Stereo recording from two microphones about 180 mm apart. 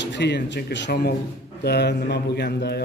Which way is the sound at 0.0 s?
75° left (ahead or behind).